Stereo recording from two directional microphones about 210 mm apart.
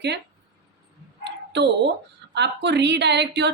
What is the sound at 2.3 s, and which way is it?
Speech, 55° right (ahead or behind).